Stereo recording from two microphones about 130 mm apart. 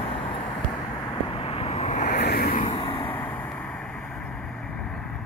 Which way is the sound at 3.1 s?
10° left (ahead or behind).